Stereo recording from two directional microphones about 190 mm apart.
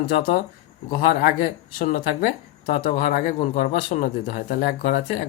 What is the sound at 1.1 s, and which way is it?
A man's voice, 50° left (ahead or behind).